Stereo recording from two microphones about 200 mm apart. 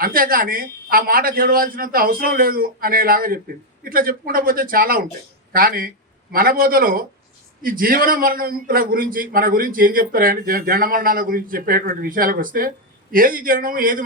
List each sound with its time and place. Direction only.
0.0 s a man's voice: 45° right (ahead or behind)